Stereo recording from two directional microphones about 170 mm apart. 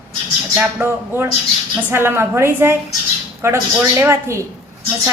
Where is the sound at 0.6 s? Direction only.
10° right (ahead or behind).